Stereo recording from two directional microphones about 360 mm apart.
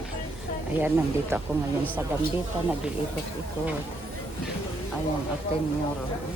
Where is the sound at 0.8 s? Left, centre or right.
Centre.